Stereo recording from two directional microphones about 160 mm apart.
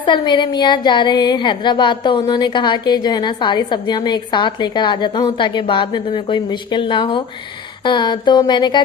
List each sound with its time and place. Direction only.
0.0 s speech: 30° left (ahead or behind)